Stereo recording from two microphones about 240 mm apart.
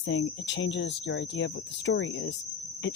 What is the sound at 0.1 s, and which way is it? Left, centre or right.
Speech, left.